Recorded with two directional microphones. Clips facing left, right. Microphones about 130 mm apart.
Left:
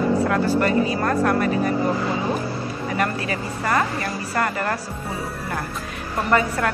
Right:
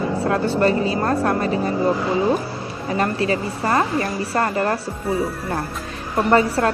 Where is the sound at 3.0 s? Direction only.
30° right (ahead or behind).